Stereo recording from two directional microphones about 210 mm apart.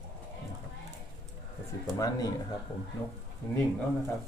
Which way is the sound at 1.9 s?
15° left (ahead or behind).